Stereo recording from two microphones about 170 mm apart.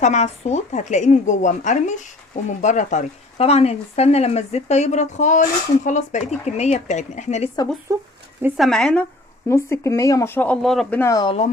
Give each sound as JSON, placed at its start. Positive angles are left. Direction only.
{"t": 0.0, "sound": "a woman's voice", "side_deg": 40}
{"t": 7.9, "sound": "speech", "side_deg": -20}
{"t": 8.5, "sound": "speech", "side_deg": 0}
{"t": 9.5, "sound": "speech", "side_deg": 15}
{"t": 11.0, "sound": "speech", "side_deg": 25}